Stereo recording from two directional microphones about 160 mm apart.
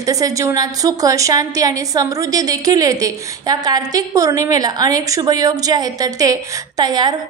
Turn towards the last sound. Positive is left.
turn(degrees=-25)  # may be behind; listen again after turning